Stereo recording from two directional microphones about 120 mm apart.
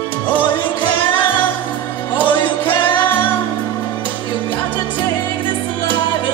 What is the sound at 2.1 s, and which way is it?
Music, 45° left (ahead or behind).